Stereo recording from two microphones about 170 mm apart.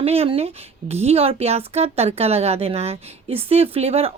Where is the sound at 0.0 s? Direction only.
35° right (ahead or behind).